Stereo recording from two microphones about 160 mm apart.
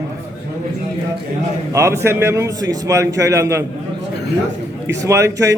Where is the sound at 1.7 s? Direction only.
15° right (ahead or behind).